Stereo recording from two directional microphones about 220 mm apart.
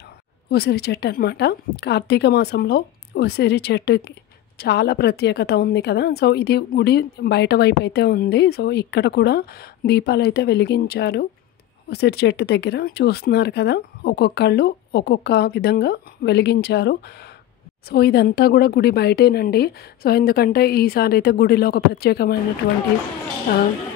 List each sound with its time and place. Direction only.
0.5 s a woman's voice: 45° left (ahead or behind)